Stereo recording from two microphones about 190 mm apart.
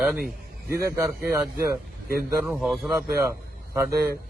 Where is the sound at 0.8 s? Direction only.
15° right (ahead or behind).